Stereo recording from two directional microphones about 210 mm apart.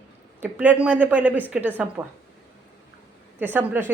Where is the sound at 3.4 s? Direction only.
10° right (ahead or behind).